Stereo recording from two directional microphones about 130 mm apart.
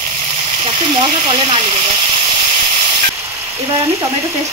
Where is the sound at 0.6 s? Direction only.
40° right (ahead or behind).